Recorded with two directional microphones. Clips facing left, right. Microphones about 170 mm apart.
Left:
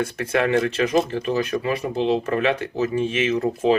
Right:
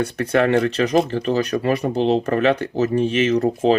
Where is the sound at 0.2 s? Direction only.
40° right (ahead or behind).